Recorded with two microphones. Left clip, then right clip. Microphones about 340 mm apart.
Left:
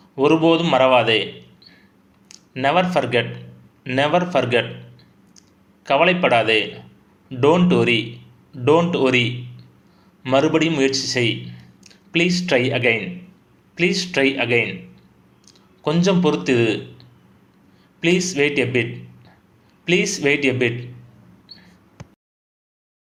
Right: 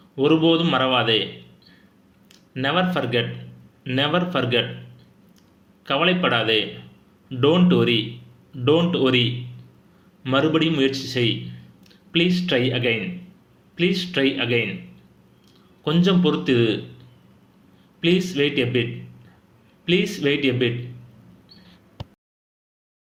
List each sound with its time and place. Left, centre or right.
0.2 s a man's voice: centre
5.8 s a man's voice: centre
18.0 s a man's voice: centre